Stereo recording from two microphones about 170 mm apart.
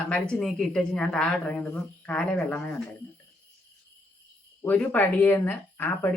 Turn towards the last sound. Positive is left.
turn(degrees=10)  # may be behind; listen again after turning